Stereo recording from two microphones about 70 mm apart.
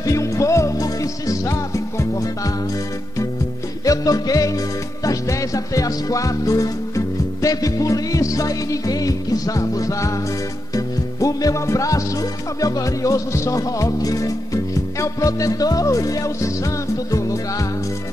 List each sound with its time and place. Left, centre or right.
0.0 s music: left
3.8 s music: left